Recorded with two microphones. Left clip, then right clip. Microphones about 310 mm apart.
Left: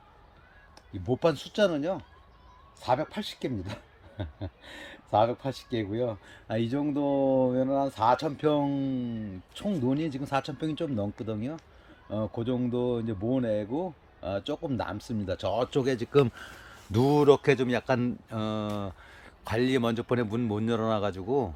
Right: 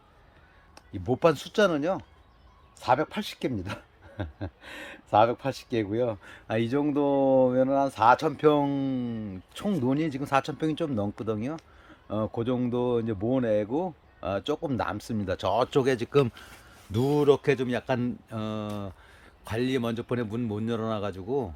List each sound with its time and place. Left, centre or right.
1.2 s speech: centre